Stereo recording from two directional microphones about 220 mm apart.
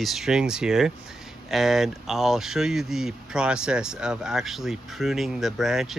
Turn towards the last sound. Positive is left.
turn(degrees=0)  # may be behind; listen again after turning